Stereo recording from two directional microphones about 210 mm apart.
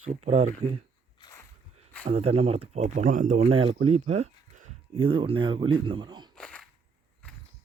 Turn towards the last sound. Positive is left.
turn(degrees=5)  # may be behind; listen again after turning